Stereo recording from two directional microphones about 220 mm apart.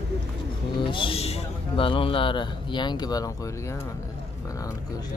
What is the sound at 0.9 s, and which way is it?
A man's voice, 25° left (ahead or behind).